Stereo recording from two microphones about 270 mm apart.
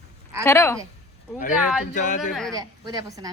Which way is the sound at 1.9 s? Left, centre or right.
Left.